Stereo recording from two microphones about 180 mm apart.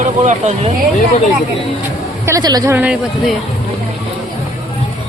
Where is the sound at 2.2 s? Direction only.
20° right (ahead or behind).